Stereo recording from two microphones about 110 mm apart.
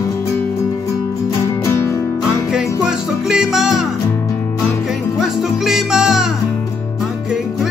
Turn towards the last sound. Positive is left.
turn(degrees=-5)  # may be behind; listen again after turning